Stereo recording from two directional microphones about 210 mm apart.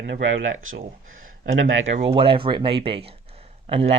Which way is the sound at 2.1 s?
25° right (ahead or behind).